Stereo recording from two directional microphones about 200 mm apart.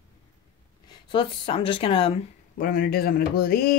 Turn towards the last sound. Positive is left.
turn(degrees=50)  # may be behind; listen again after turning